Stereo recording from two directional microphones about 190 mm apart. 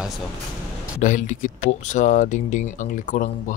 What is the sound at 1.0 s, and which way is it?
Speech, 40° left (ahead or behind).